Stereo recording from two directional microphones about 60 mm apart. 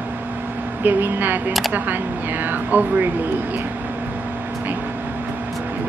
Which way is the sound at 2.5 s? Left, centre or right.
Right.